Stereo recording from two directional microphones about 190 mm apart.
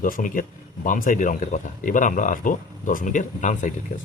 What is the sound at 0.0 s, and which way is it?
Speech, 45° left (ahead or behind).